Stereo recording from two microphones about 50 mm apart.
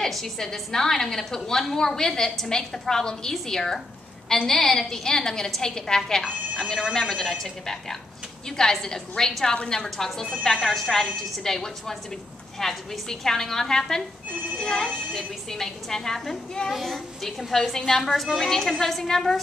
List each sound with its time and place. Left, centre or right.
0.0 s a woman's voice: centre
8.5 s a woman's voice: centre